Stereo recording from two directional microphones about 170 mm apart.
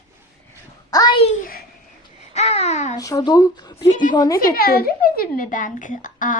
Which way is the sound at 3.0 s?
20° left (ahead or behind).